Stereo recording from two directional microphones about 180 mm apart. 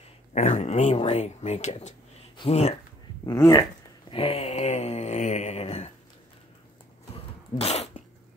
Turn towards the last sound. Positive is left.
turn(degrees=35)  # may be behind; listen again after turning